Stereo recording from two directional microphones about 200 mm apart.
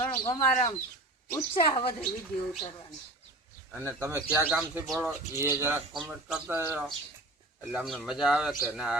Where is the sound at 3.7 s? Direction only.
10° right (ahead or behind).